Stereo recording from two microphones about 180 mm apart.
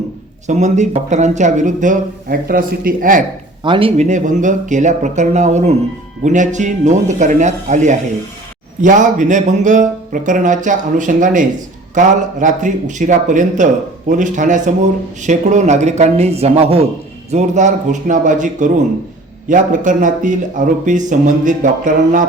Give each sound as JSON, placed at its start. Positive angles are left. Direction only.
{"t": 0.4, "sound": "speech", "side_deg": -40}
{"t": 3.6, "sound": "speech", "side_deg": -30}